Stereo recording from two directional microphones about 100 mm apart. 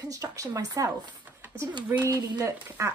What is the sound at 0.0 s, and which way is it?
A woman's voice, 35° right (ahead or behind).